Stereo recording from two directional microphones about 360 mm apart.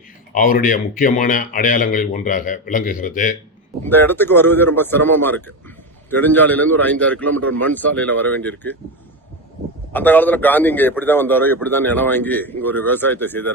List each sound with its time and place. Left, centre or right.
0.3 s a man's voice: left
3.8 s a man's voice: centre
9.9 s a man's voice: centre